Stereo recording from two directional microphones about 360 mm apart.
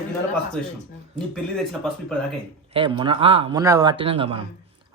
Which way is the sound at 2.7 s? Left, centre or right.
Centre.